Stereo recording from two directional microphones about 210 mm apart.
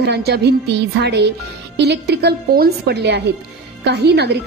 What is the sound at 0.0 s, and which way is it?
A woman's voice, 50° right (ahead or behind).